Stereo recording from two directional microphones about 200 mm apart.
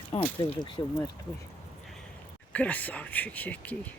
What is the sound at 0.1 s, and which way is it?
Speech, 30° left (ahead or behind).